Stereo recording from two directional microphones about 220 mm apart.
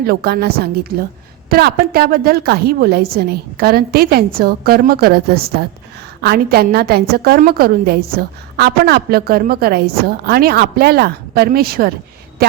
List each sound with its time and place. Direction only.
0.0 s a woman's voice: 45° right (ahead or behind)